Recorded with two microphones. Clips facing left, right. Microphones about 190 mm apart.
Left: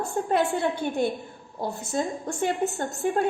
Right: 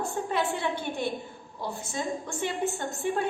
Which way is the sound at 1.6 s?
45° left (ahead or behind).